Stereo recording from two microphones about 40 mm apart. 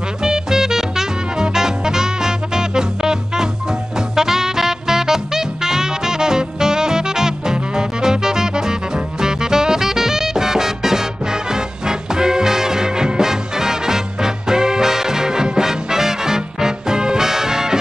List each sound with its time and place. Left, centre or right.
0.2 s music: centre